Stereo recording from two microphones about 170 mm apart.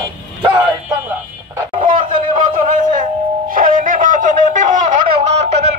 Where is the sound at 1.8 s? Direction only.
55° right (ahead or behind).